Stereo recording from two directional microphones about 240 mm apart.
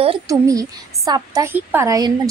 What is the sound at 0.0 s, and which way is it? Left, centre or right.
A woman's voice, centre.